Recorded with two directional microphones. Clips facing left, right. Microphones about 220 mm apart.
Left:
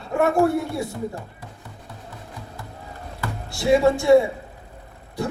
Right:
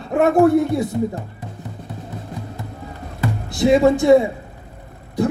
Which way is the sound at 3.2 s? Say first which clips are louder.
Right 9 dB; 20° right (ahead or behind).